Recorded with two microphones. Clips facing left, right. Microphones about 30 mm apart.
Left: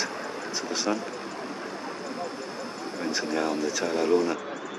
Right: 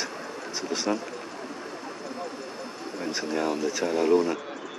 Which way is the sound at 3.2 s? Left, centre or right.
Centre.